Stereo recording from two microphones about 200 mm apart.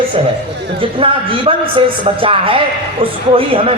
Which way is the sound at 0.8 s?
25° right (ahead or behind).